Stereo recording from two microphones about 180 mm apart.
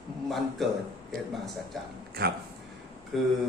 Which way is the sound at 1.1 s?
55° right (ahead or behind).